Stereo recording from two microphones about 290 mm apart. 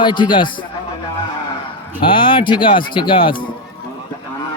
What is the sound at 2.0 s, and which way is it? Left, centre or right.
Speech, centre.